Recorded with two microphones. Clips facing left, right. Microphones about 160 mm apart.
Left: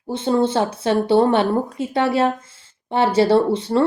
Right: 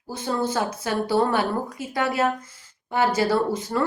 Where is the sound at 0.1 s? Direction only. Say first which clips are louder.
Left 7 dB; 25° left (ahead or behind).